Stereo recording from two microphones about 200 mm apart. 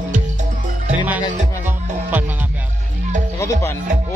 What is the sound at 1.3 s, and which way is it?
Music, 35° right (ahead or behind).